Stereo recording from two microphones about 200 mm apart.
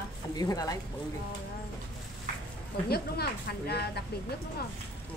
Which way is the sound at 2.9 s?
55° left (ahead or behind).